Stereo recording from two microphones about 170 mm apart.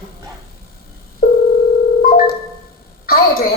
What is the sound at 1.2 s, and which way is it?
Telephone, 60° left (ahead or behind).